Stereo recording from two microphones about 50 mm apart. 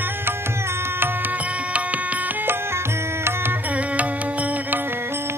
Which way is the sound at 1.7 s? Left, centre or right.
Right.